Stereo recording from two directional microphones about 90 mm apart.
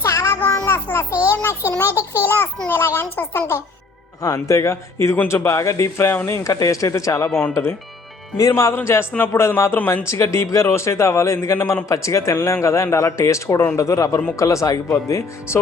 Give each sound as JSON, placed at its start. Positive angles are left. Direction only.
{"t": 0.0, "sound": "child singing", "side_deg": 30}
{"t": 2.0, "sound": "a man's voice", "side_deg": 30}
{"t": 7.3, "sound": "speech", "side_deg": 25}
{"t": 8.4, "sound": "a man's voice", "side_deg": 35}